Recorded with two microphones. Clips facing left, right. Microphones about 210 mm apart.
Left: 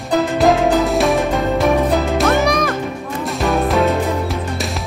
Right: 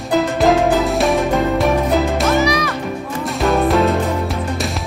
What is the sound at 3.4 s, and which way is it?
Music, centre (ahead or behind).